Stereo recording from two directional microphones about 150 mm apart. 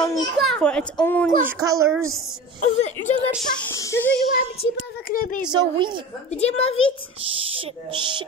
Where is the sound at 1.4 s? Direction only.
20° right (ahead or behind).